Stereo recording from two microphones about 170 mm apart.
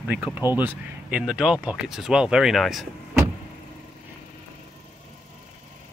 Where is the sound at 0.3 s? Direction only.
20° left (ahead or behind).